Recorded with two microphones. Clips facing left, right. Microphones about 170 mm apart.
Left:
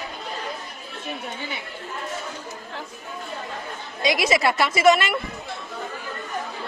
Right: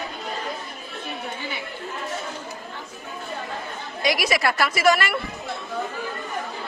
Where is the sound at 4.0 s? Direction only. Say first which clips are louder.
Left 2 dB; 25° left (ahead or behind).